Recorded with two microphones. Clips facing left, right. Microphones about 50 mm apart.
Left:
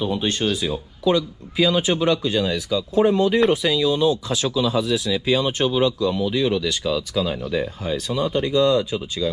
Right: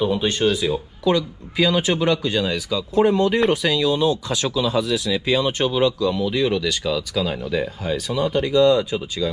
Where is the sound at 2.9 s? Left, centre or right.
Right.